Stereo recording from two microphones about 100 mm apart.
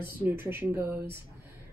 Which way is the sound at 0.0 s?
20° right (ahead or behind).